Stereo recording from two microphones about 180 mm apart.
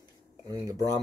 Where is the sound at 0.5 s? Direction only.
20° right (ahead or behind).